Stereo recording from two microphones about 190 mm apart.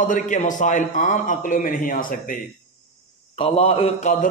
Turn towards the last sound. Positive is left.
turn(degrees=40)  # may be behind; listen again after turning